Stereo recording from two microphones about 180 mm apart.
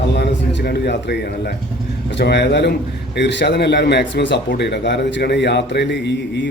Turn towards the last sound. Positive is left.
turn(degrees=75)  # may be behind; listen again after turning